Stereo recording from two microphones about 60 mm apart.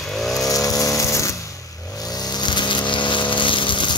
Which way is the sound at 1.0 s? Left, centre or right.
Left.